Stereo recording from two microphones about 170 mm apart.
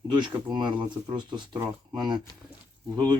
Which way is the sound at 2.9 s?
25° right (ahead or behind).